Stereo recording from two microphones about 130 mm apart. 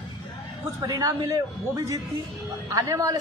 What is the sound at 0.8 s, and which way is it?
A man's voice, 25° right (ahead or behind).